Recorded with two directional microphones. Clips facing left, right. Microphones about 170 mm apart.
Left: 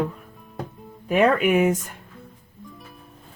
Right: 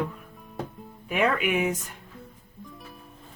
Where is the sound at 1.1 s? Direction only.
40° left (ahead or behind).